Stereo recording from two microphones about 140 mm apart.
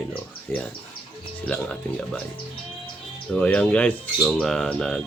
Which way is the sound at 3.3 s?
10° left (ahead or behind).